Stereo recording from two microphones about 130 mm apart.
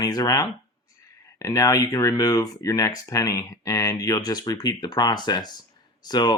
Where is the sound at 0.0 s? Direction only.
25° left (ahead or behind).